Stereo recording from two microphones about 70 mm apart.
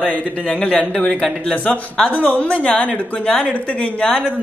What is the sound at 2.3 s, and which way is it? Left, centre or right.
Speech, centre.